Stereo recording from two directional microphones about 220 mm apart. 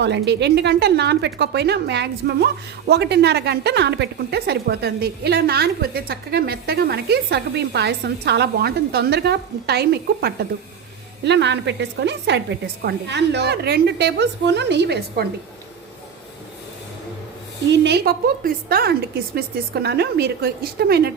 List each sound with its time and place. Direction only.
0.0 s a woman's voice: 50° right (ahead or behind)
17.7 s a woman's voice: 50° right (ahead or behind)